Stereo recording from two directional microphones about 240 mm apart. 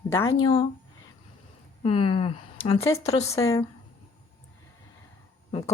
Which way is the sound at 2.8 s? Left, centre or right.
Centre.